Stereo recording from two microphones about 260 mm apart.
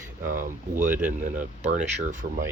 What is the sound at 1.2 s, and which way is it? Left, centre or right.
Speech, right.